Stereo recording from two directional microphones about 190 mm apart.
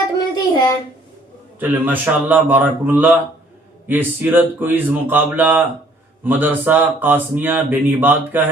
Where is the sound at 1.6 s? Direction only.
10° right (ahead or behind).